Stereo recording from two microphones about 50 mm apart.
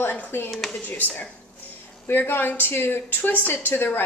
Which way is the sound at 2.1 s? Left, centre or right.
Left.